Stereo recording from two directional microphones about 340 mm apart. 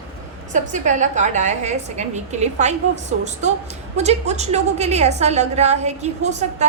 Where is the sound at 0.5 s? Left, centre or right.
Right.